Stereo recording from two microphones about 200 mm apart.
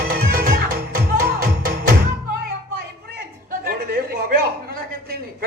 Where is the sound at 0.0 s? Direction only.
50° right (ahead or behind).